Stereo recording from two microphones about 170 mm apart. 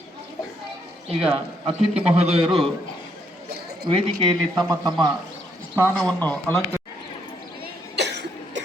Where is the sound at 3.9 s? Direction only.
30° right (ahead or behind).